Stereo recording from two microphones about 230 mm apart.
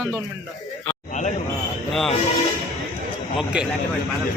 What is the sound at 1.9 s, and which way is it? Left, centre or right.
Speech, centre.